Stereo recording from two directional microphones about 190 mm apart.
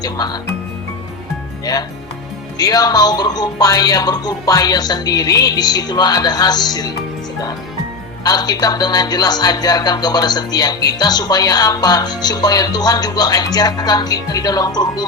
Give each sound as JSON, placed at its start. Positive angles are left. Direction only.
{"t": 0.0, "sound": "speech", "side_deg": 20}
{"t": 1.7, "sound": "speech", "side_deg": 20}
{"t": 8.2, "sound": "speech", "side_deg": 20}